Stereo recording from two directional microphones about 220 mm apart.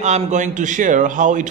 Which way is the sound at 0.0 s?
30° right (ahead or behind).